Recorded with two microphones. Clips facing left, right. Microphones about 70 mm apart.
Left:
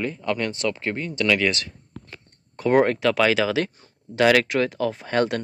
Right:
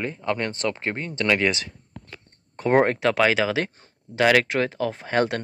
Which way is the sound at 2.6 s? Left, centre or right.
Right.